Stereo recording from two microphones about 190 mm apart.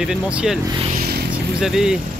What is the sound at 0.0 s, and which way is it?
Speech, 5° right (ahead or behind).